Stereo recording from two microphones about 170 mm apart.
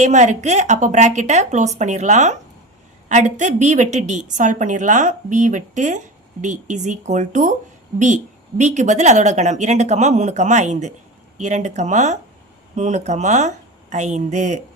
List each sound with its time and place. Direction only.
0.0 s a woman's voice: 45° right (ahead or behind)